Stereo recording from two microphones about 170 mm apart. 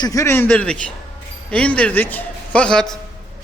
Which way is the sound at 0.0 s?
20° left (ahead or behind).